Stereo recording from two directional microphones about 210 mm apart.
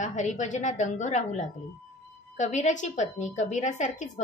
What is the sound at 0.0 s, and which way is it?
A woman's voice, 35° left (ahead or behind).